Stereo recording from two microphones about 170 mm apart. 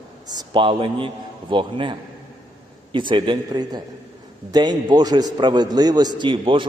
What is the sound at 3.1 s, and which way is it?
A man's voice, 30° right (ahead or behind).